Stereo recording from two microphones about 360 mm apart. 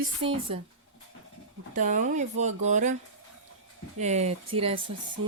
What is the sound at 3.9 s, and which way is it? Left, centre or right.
Speech, centre.